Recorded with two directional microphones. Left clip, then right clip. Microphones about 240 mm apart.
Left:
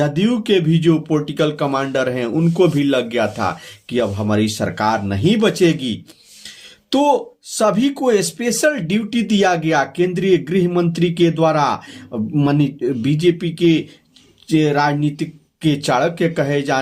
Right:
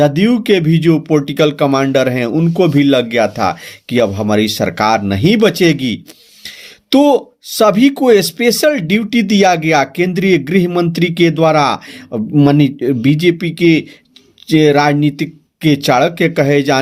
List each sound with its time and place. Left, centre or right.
0.0 s speech: right